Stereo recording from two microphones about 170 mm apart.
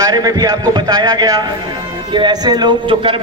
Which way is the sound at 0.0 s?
20° right (ahead or behind).